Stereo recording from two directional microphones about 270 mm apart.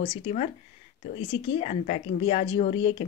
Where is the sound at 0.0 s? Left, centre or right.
Left.